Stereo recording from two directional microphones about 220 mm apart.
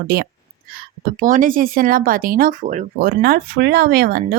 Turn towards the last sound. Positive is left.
turn(degrees=-40)  # may be behind; listen again after turning